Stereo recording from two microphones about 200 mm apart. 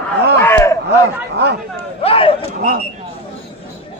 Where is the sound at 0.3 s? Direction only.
10° left (ahead or behind).